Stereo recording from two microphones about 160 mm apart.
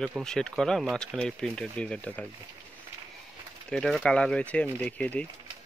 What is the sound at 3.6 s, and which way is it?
Speech, 5° left (ahead or behind).